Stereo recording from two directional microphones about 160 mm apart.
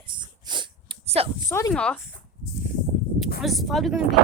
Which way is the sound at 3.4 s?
Centre (ahead or behind).